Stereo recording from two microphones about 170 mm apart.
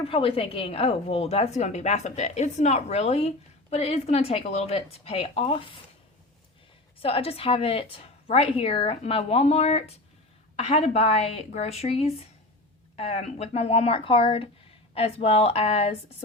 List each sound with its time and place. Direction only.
0.0 s a woman's voice: 35° left (ahead or behind)
7.0 s a woman's voice: 35° left (ahead or behind)